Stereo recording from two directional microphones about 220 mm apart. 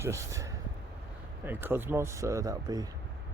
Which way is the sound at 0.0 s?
15° right (ahead or behind).